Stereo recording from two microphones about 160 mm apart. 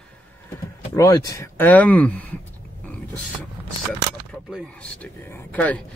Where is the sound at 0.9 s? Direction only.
20° left (ahead or behind).